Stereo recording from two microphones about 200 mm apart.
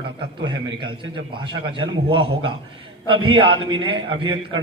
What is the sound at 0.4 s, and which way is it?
A man's voice, 25° right (ahead or behind).